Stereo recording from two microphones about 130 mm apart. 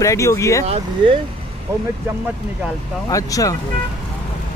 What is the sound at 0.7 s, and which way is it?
Speech, 40° right (ahead or behind).